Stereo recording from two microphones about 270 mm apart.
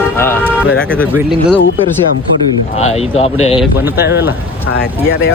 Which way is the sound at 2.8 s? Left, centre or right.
Left.